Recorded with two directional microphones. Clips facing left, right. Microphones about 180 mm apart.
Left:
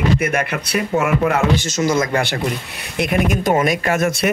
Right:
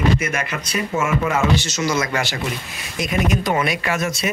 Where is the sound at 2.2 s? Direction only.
60° left (ahead or behind).